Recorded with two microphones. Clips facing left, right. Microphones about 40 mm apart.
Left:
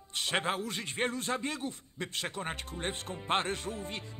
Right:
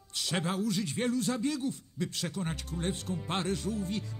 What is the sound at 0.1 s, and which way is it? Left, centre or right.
Speech, left.